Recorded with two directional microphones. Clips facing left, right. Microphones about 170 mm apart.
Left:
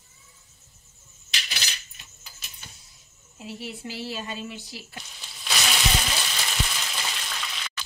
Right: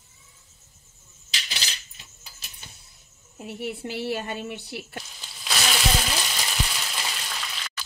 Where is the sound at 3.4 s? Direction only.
55° right (ahead or behind).